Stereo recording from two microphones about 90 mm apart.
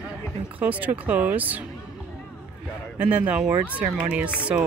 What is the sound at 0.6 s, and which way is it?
Speech, 15° right (ahead or behind).